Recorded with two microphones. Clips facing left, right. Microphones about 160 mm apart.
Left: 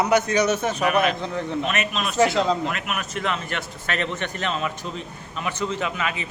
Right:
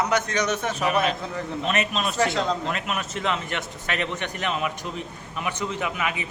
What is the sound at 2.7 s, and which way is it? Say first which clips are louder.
A man's voice: even; 30° right (ahead or behind).